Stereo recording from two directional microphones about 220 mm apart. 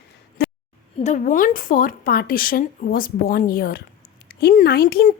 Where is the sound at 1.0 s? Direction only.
35° left (ahead or behind).